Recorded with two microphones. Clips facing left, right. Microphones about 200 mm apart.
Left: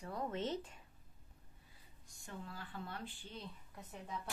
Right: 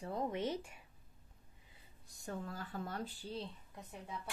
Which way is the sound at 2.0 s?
40° right (ahead or behind).